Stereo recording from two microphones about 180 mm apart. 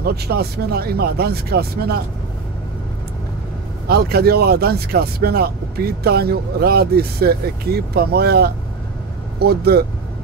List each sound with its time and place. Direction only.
0.0 s speech: 60° right (ahead or behind)
3.8 s speech: 60° right (ahead or behind)